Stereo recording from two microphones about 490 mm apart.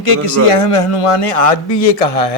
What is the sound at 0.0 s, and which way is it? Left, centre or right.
A man's voice, left.